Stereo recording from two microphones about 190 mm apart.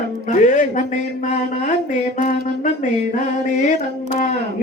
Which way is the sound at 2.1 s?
40° left (ahead or behind).